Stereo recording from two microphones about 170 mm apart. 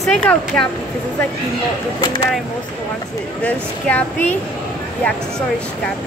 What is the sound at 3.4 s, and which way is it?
Speech, 10° left (ahead or behind).